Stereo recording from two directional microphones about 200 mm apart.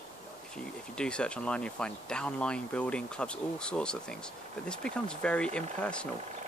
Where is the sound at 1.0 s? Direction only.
5° left (ahead or behind).